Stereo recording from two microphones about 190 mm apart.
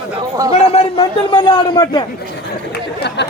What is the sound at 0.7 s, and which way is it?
A man's voice, 30° left (ahead or behind).